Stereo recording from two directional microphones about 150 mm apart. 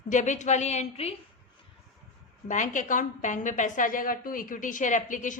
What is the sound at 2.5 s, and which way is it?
A woman's voice, 60° left (ahead or behind).